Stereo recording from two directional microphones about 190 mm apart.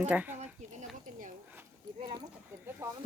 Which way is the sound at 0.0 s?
10° right (ahead or behind).